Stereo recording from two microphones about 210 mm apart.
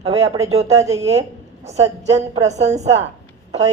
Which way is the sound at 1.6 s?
30° right (ahead or behind).